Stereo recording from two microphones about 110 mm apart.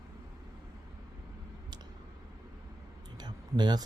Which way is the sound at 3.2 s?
40° right (ahead or behind).